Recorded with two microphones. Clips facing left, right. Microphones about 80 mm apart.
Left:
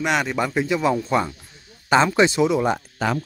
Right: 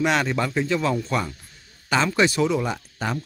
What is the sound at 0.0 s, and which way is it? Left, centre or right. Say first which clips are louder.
Speech: even; centre.